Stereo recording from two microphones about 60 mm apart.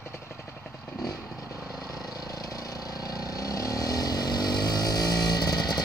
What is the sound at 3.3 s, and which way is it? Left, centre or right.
Vehicle, left.